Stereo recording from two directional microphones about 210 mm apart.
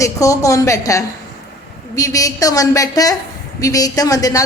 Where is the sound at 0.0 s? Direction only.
15° left (ahead or behind).